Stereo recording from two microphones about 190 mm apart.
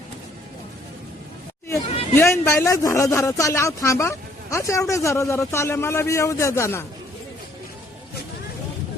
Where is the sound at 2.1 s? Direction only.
10° left (ahead or behind).